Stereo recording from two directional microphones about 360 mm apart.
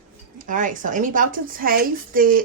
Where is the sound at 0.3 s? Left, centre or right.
Right.